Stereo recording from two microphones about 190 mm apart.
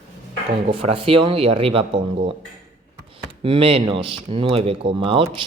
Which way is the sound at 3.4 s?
30° right (ahead or behind).